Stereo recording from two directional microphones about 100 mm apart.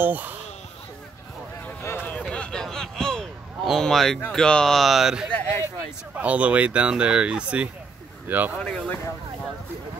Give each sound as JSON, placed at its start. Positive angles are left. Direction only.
{"t": 0.0, "sound": "speech", "side_deg": -15}
{"t": 1.6, "sound": "a sound", "side_deg": 20}
{"t": 4.3, "sound": "speech", "side_deg": 5}
{"t": 6.1, "sound": "speech", "side_deg": -15}
{"t": 8.5, "sound": "speech", "side_deg": 10}